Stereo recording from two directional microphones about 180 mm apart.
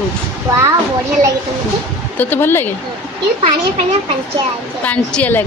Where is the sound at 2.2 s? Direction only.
10° left (ahead or behind).